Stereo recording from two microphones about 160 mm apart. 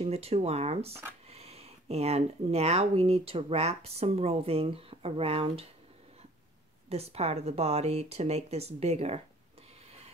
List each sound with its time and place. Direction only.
0.0 s speech: 40° right (ahead or behind)
6.9 s speech: 40° right (ahead or behind)